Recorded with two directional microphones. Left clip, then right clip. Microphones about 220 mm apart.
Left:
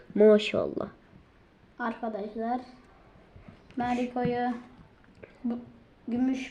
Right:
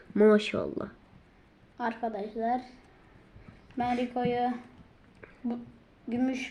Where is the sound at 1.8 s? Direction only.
20° left (ahead or behind).